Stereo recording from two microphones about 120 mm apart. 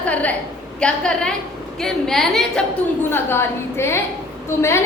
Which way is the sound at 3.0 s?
20° left (ahead or behind).